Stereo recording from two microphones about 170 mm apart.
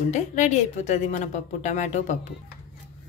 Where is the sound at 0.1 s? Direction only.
45° left (ahead or behind).